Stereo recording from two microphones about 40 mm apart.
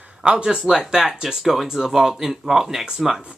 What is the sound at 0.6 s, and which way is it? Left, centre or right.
Speech, centre.